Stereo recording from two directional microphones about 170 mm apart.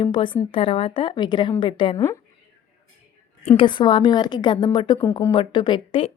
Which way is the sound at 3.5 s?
30° left (ahead or behind).